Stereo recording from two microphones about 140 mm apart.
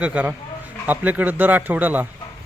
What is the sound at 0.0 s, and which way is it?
A man's voice, 10° right (ahead or behind).